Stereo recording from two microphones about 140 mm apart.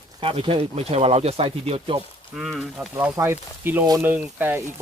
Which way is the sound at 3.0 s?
15° right (ahead or behind).